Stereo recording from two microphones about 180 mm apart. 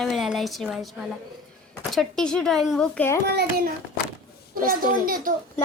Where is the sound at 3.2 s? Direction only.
60° right (ahead or behind).